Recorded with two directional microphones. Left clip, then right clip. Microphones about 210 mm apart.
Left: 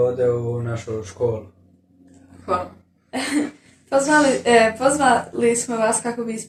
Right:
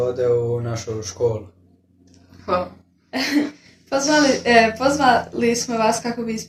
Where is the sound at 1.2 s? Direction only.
55° right (ahead or behind).